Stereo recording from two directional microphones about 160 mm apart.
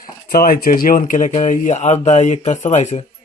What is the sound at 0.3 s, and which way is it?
Speech, 65° left (ahead or behind).